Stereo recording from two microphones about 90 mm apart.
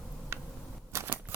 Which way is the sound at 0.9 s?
30° right (ahead or behind).